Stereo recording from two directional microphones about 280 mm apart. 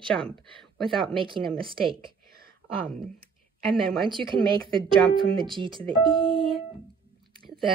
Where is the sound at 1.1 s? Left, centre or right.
Centre.